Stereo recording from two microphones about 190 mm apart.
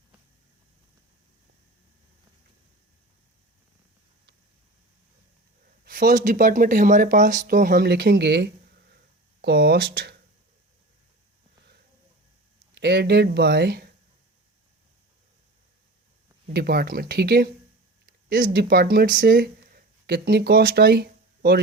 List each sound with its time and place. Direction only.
5.8 s speech: 45° right (ahead or behind)
12.7 s speech: 60° right (ahead or behind)
16.5 s speech: 55° right (ahead or behind)